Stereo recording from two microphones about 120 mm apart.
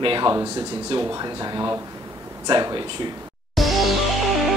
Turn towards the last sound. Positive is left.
turn(degrees=0)  # may be behind; listen again after turning